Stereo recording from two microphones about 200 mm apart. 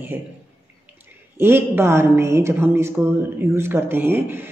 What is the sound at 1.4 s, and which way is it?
A woman's voice, 10° right (ahead or behind).